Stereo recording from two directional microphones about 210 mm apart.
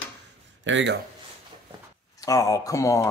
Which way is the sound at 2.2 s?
15° left (ahead or behind).